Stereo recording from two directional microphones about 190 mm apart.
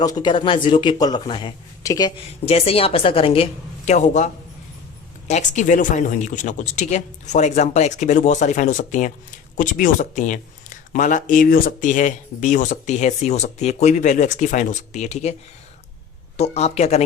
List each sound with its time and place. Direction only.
0.0 s a man's voice: 20° left (ahead or behind)
2.5 s a man's voice: 30° left (ahead or behind)
5.3 s speech: 40° left (ahead or behind)
16.4 s speech: 35° left (ahead or behind)